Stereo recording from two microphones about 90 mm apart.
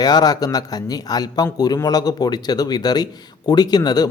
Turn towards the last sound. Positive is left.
turn(degrees=50)  # may be behind; listen again after turning